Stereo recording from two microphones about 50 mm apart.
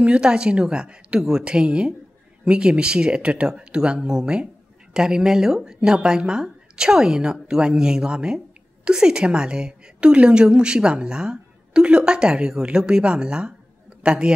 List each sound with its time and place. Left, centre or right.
0.0 s a woman's voice: centre